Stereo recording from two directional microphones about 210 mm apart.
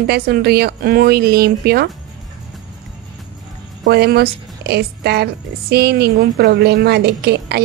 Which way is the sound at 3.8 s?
50° right (ahead or behind).